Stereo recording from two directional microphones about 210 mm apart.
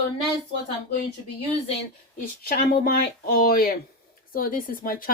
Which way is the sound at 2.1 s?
45° left (ahead or behind).